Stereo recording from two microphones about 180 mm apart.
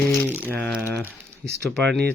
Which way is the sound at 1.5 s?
65° right (ahead or behind).